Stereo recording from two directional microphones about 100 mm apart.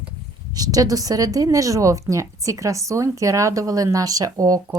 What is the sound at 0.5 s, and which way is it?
Speech, 40° right (ahead or behind).